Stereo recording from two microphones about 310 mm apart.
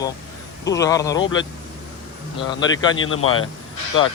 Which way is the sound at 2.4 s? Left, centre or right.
Centre.